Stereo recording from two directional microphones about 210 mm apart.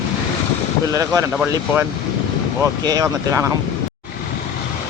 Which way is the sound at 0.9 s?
15° right (ahead or behind).